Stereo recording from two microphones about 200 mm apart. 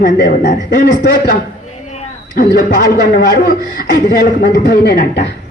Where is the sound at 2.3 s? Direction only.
45° left (ahead or behind).